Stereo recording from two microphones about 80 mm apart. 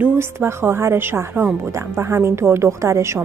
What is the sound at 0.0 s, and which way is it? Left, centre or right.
Speech, right.